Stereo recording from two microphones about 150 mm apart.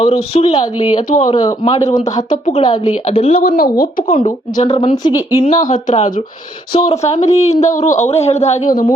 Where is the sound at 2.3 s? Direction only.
55° left (ahead or behind).